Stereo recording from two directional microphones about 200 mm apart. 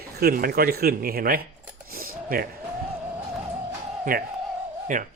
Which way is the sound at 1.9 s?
45° right (ahead or behind).